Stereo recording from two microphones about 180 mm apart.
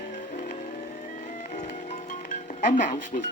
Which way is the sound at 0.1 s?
40° left (ahead or behind).